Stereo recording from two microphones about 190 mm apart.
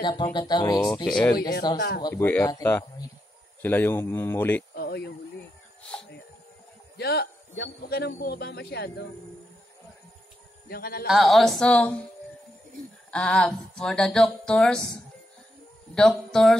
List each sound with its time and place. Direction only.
0.0 s speech: 25° left (ahead or behind)
1.0 s speech: 5° left (ahead or behind)
1.8 s a man's voice: 55° left (ahead or behind)
2.0 s speech: 10° left (ahead or behind)
4.7 s a sound: 55° left (ahead or behind)
7.0 s a man's voice: 60° left (ahead or behind)
10.7 s a man's voice: 55° left (ahead or behind)
11.1 s speech: centre (ahead or behind)
13.1 s speech: 5° left (ahead or behind)
15.9 s speech: centre (ahead or behind)